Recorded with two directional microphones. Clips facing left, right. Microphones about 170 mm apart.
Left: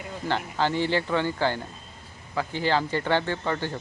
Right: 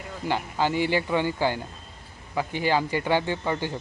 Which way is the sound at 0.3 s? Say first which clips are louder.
Right 1 dB; 10° right (ahead or behind).